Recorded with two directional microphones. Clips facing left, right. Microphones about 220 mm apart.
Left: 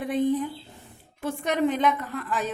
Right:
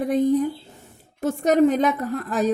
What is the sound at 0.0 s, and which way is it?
A woman's voice, 40° right (ahead or behind).